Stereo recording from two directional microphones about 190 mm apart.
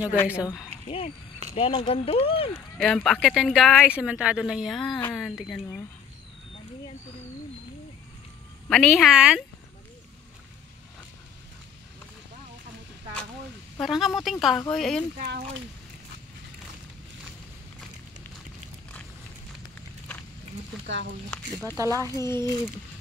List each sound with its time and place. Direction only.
0.8 s speech: 30° left (ahead or behind)
2.8 s speech: 5° left (ahead or behind)
8.6 s speech: centre (ahead or behind)
13.7 s speech: centre (ahead or behind)
15.1 s speech: 60° right (ahead or behind)
20.8 s speech: 70° right (ahead or behind)
21.3 s speech: 5° left (ahead or behind)
21.7 s speech: 15° right (ahead or behind)
22.1 s speech: 15° left (ahead or behind)